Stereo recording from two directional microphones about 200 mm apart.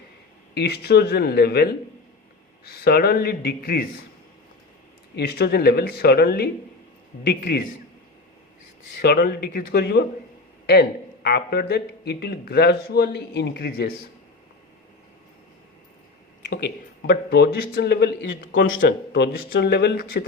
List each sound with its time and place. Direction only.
0.5 s speech: 55° left (ahead or behind)
5.1 s speech: 55° left (ahead or behind)
9.0 s speech: 50° left (ahead or behind)
16.5 s speech: 50° left (ahead or behind)